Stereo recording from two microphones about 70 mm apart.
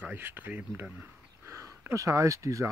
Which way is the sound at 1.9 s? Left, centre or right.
Right.